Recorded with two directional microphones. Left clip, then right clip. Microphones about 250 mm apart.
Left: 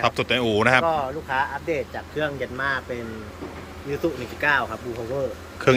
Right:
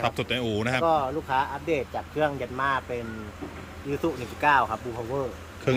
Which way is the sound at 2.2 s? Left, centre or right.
Centre.